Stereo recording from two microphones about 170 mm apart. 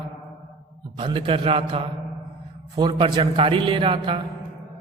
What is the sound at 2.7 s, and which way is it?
A man's voice, 25° right (ahead or behind).